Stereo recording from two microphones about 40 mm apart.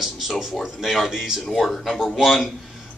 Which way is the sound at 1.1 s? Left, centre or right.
Centre.